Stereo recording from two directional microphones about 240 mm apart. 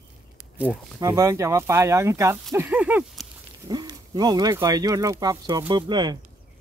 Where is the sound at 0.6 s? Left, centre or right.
Centre.